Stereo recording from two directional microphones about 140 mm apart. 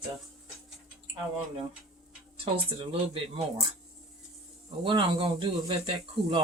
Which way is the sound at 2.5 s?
40° right (ahead or behind).